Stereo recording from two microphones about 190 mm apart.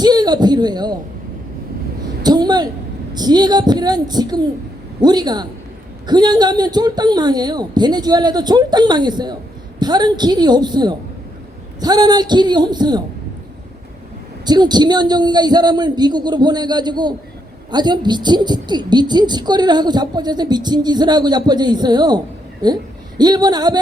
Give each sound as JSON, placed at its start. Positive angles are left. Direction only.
{"t": 0.0, "sound": "speech", "side_deg": -20}
{"t": 2.2, "sound": "a sound", "side_deg": -20}
{"t": 3.2, "sound": "speech", "side_deg": -20}
{"t": 14.4, "sound": "a woman's voice", "side_deg": -20}